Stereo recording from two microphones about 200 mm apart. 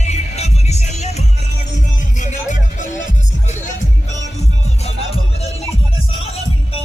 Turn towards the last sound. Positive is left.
turn(degrees=30)  # may be behind; listen again after turning